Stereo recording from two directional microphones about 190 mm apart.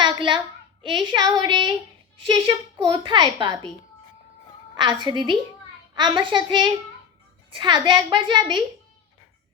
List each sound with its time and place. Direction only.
0.0 s a sound: 25° right (ahead or behind)
0.8 s a child's voice: 25° right (ahead or behind)
4.8 s a child's voice: 25° right (ahead or behind)